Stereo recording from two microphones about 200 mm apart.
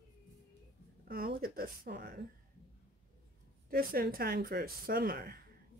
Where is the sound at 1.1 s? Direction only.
50° right (ahead or behind).